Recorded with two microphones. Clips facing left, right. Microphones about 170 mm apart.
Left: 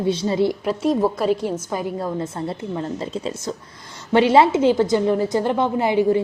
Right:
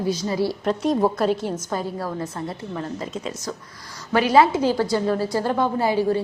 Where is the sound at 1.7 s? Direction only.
15° left (ahead or behind).